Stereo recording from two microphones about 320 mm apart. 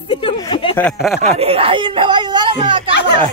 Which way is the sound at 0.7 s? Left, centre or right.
Centre.